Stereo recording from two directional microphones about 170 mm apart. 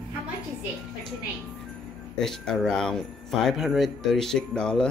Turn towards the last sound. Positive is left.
turn(degrees=5)  # may be behind; listen again after turning